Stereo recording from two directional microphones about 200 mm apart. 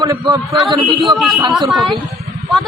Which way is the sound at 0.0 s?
20° right (ahead or behind).